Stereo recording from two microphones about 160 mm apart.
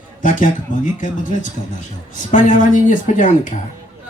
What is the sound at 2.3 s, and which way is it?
Speech, 55° left (ahead or behind).